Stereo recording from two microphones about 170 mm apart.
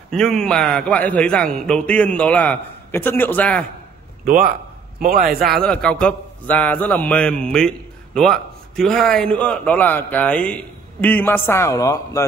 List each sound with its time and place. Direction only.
0.1 s a man's voice: 5° left (ahead or behind)
4.2 s a man's voice: 60° right (ahead or behind)
5.5 s a man's voice: 5° left (ahead or behind)